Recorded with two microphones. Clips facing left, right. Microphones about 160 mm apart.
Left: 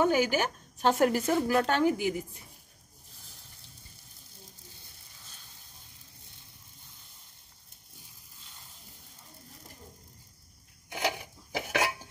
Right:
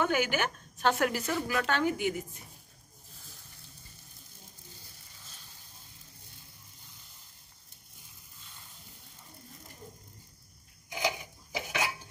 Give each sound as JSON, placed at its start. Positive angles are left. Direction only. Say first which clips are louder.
{"t": 0.0, "sound": "speech", "louder": "left 3 dB", "side_deg": 35}
{"t": 10.9, "sound": "dishes", "louder": "left 1 dB", "side_deg": 60}